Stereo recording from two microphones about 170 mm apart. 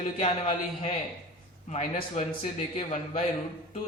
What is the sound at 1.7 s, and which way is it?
A man's voice, 40° left (ahead or behind).